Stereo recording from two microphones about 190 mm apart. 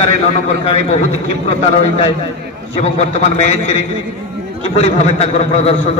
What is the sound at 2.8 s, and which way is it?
Speech, 35° left (ahead or behind).